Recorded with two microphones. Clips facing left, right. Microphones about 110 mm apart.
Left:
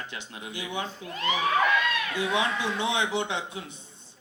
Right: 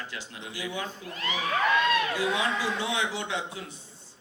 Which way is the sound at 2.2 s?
20° left (ahead or behind).